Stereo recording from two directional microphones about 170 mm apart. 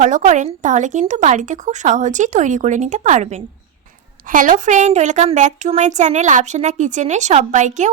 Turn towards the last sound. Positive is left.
turn(degrees=-45)  # may be behind; listen again after turning